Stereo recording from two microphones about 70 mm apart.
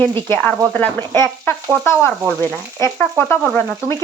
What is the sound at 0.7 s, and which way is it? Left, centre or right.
Frying, left.